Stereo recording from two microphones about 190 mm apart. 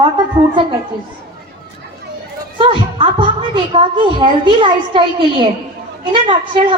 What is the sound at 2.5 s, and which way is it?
Music, 25° right (ahead or behind).